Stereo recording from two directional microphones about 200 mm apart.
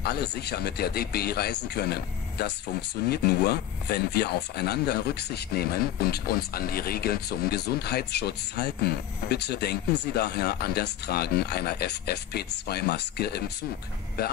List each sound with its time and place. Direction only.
0.0 s speech: 55° left (ahead or behind)